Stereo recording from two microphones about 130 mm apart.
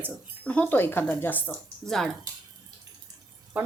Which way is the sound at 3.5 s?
10° right (ahead or behind).